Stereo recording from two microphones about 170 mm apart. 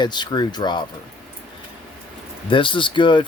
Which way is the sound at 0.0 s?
25° left (ahead or behind).